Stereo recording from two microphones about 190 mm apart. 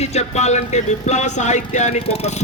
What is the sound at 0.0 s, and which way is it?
Speech, 35° left (ahead or behind).